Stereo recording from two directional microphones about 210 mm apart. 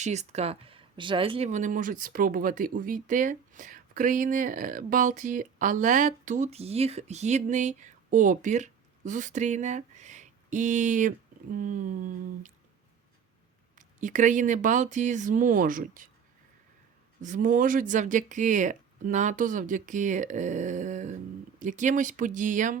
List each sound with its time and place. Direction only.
0.0 s speech: 30° right (ahead or behind)
13.7 s speech: 35° right (ahead or behind)
17.2 s speech: 35° right (ahead or behind)